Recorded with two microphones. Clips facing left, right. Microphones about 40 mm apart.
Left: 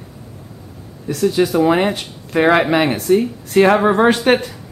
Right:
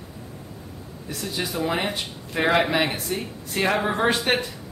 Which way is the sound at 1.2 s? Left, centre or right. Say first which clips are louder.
Left 13 dB; left.